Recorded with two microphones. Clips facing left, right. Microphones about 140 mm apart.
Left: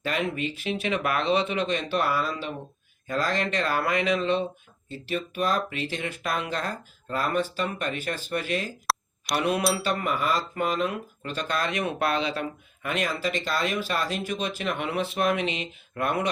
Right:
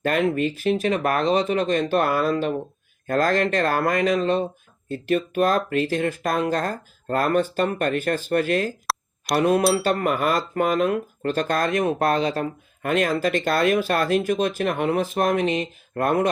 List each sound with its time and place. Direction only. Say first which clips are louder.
0.0 s speech: right 7 dB; 50° right (ahead or behind)